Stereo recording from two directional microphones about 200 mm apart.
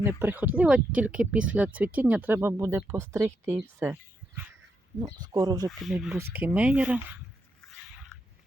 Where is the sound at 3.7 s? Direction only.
10° right (ahead or behind).